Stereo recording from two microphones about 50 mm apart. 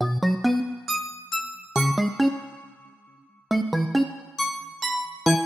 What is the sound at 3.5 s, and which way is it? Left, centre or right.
Music, centre.